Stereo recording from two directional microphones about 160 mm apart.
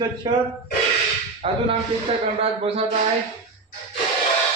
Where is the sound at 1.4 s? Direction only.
35° right (ahead or behind).